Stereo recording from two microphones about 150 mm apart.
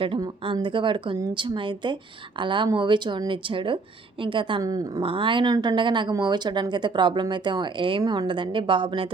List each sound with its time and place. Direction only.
0.0 s speech: 35° right (ahead or behind)
5.0 s speech: 35° right (ahead or behind)